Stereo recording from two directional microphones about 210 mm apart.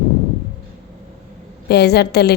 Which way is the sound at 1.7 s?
50° left (ahead or behind).